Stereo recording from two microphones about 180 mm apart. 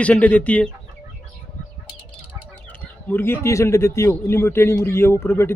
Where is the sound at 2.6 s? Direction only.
10° left (ahead or behind).